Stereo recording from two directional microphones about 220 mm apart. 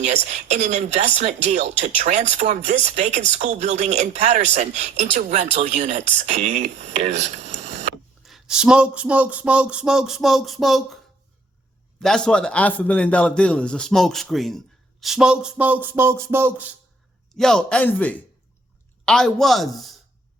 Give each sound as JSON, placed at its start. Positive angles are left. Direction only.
{"t": 0.0, "sound": "speech", "side_deg": -30}
{"t": 8.2, "sound": "speech", "side_deg": 0}
{"t": 12.0, "sound": "speech", "side_deg": 5}
{"t": 17.3, "sound": "speech", "side_deg": 0}